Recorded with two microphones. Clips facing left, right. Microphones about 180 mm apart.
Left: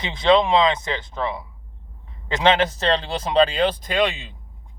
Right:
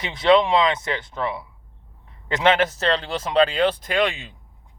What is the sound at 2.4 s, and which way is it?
Speech, 30° left (ahead or behind).